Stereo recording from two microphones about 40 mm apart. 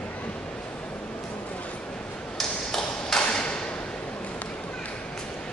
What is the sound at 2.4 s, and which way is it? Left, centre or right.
Ping, centre.